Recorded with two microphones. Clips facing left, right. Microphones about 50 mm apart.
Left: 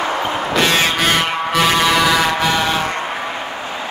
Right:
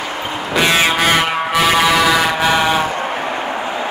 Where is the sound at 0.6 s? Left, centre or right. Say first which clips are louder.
Right 3 dB; centre.